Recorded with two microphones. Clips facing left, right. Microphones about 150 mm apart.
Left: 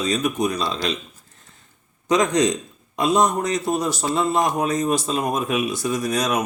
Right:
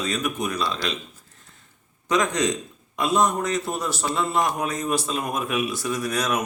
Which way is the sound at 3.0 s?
40° left (ahead or behind).